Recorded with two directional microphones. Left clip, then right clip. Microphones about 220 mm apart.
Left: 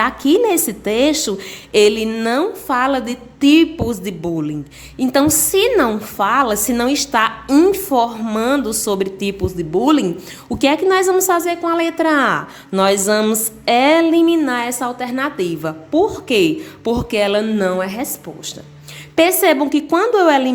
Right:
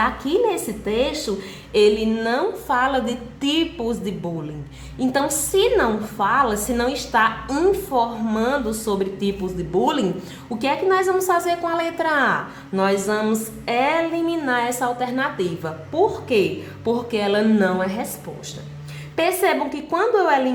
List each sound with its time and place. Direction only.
0.0 s a woman's voice: 45° left (ahead or behind)
10.6 s a woman's voice: 45° left (ahead or behind)